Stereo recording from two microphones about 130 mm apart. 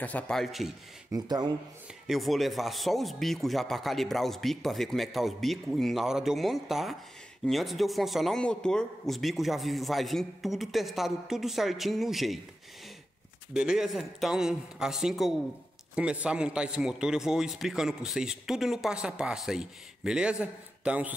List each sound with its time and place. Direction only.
0.0 s a man's voice: 10° left (ahead or behind)
1.1 s speech: 30° right (ahead or behind)
2.0 s a man's voice: centre (ahead or behind)
13.5 s a man's voice: 5° right (ahead or behind)